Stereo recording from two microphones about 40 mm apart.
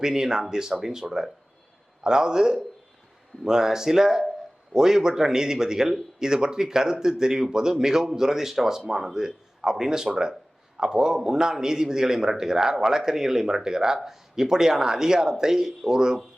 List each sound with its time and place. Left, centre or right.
0.0 s a man's voice: centre